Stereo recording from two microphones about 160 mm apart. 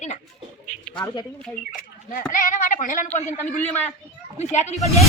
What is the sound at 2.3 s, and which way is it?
Speech, 55° left (ahead or behind).